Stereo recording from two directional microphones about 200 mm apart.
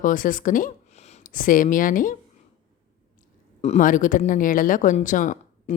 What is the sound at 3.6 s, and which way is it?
Speech, 35° left (ahead or behind).